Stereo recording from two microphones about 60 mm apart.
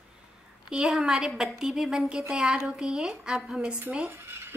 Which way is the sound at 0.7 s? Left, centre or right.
Centre.